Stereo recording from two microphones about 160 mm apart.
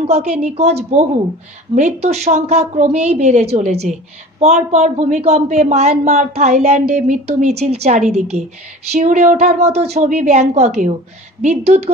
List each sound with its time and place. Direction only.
0.0 s a woman's voice: 45° right (ahead or behind)